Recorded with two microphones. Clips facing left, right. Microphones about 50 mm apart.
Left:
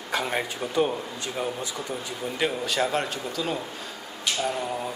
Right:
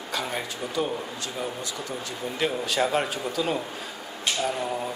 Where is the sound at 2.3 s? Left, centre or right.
Centre.